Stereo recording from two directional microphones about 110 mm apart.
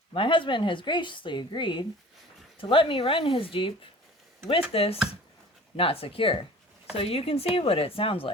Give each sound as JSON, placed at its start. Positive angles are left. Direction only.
{"t": 0.1, "sound": "a woman's voice", "side_deg": 50}
{"t": 4.7, "sound": "speech", "side_deg": 60}